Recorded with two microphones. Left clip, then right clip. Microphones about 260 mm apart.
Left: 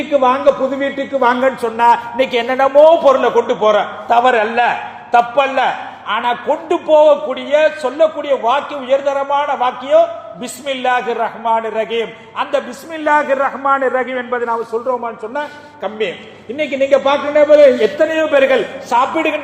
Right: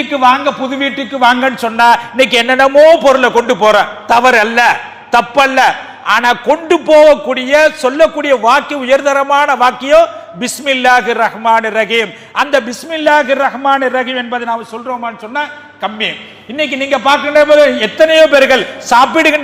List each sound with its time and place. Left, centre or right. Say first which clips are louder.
0.1 s a man's voice: right 1 dB; right